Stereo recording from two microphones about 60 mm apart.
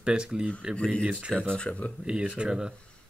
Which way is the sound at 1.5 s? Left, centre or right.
Centre.